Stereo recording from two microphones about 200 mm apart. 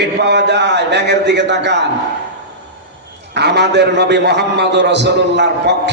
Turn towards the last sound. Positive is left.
turn(degrees=-60)  # may be behind; listen again after turning